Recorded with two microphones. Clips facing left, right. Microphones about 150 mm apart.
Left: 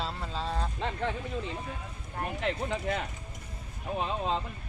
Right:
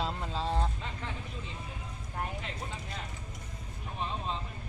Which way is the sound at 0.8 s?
65° left (ahead or behind).